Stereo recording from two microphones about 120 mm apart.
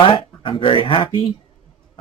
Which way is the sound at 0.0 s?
50° left (ahead or behind).